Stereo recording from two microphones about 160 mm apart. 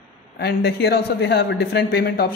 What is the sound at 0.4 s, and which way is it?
A man's voice, 90° left.